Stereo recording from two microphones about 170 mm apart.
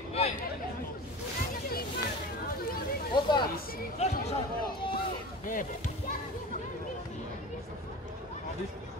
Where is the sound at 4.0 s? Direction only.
40° left (ahead or behind).